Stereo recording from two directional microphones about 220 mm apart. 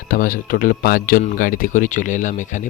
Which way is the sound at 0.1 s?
40° left (ahead or behind).